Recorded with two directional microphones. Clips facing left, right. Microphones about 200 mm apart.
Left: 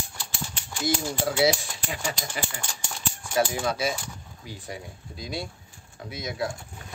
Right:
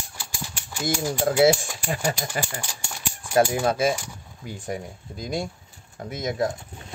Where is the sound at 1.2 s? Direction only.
50° right (ahead or behind).